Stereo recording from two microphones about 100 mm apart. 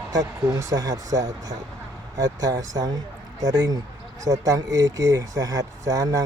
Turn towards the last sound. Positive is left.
turn(degrees=-35)  # may be behind; listen again after turning